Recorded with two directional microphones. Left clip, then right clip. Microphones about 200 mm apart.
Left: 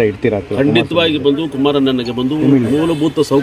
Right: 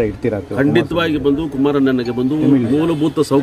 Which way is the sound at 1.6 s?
35° right (ahead or behind).